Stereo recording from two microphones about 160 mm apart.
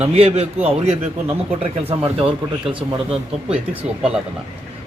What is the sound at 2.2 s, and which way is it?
Speech, 30° right (ahead or behind).